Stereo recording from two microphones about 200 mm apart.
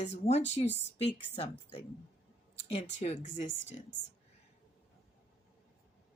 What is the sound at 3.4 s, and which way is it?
Speech, 65° left (ahead or behind).